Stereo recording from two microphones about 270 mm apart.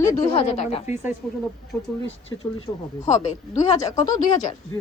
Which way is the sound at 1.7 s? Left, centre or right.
Centre.